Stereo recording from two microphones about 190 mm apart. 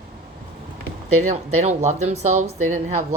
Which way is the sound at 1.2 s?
40° right (ahead or behind).